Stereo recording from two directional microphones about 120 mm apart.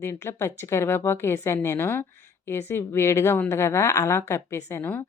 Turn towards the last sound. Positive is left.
turn(degrees=20)  # may be behind; listen again after turning